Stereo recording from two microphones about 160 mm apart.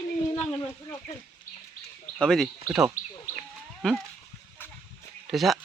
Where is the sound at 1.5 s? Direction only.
55° left (ahead or behind).